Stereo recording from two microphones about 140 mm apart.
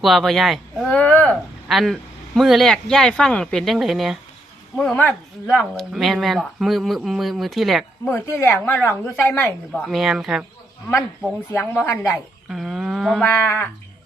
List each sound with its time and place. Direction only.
0.0 s speech: centre (ahead or behind)
0.9 s speech: 10° left (ahead or behind)
1.6 s speech: centre (ahead or behind)
8.0 s speech: 10° left (ahead or behind)
9.9 s speech: centre (ahead or behind)
11.5 s speech: 10° left (ahead or behind)
12.5 s a sound: centre (ahead or behind)
13.2 s speech: 15° left (ahead or behind)